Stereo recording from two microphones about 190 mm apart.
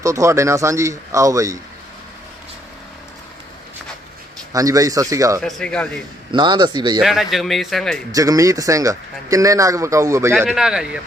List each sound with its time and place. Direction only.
0.0 s speech: 15° right (ahead or behind)
4.5 s speech: 15° right (ahead or behind)
5.4 s a man's voice: 5° left (ahead or behind)
6.3 s speech: 25° right (ahead or behind)
7.0 s a man's voice: centre (ahead or behind)
8.1 s speech: 15° right (ahead or behind)
10.3 s a man's voice: centre (ahead or behind)